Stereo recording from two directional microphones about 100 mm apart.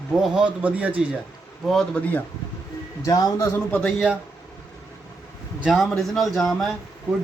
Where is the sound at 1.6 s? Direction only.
5° left (ahead or behind).